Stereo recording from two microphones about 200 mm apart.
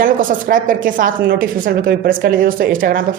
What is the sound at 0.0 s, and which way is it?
A woman's voice, 45° right (ahead or behind).